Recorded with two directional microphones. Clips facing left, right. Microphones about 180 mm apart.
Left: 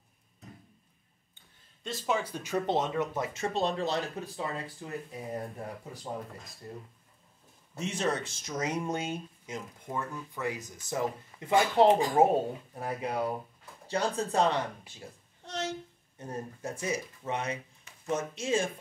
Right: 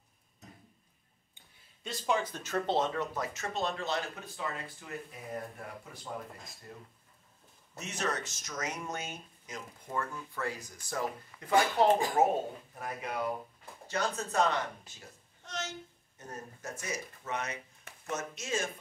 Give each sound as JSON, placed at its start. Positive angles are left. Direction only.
{"t": 1.8, "sound": "speech", "side_deg": 0}
{"t": 7.7, "sound": "speech", "side_deg": 30}
{"t": 9.8, "sound": "a woman's voice", "side_deg": 15}